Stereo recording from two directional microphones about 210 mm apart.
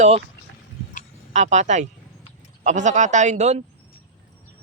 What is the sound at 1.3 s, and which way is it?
Speech, 35° right (ahead or behind).